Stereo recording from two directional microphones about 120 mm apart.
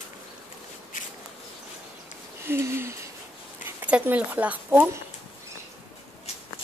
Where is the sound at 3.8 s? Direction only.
10° right (ahead or behind).